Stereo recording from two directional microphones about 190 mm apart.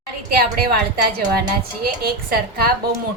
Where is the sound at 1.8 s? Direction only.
50° right (ahead or behind).